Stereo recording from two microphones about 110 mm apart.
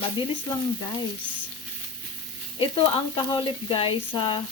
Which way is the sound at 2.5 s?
50° left (ahead or behind).